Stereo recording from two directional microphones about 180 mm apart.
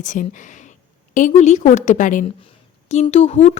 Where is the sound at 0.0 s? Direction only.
45° left (ahead or behind).